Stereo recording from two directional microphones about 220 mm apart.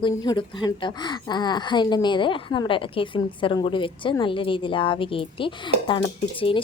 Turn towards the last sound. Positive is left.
turn(degrees=25)  # may be behind; listen again after turning